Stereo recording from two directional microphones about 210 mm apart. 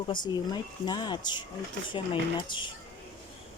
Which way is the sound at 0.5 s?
20° left (ahead or behind).